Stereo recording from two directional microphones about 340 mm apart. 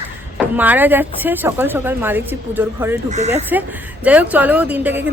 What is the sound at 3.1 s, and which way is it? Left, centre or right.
Speech, centre.